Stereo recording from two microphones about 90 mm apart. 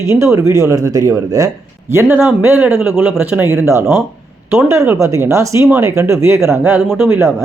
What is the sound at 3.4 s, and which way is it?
Speech, 30° right (ahead or behind).